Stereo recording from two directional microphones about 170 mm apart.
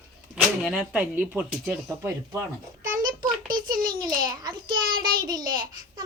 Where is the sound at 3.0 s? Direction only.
55° right (ahead or behind).